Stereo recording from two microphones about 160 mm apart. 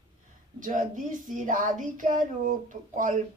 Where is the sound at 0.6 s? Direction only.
55° right (ahead or behind).